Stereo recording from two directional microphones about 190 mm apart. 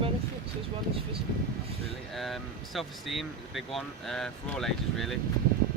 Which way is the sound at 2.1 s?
Centre (ahead or behind).